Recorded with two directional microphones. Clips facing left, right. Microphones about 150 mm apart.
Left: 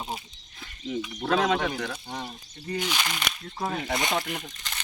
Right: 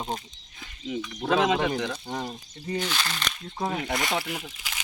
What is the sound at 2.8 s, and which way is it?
Speech, 15° left (ahead or behind).